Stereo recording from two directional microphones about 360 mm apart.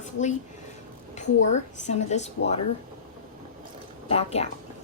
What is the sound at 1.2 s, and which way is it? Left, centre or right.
A woman's voice, centre.